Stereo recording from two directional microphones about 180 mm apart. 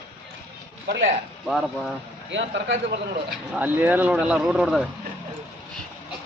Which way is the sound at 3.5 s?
10° right (ahead or behind).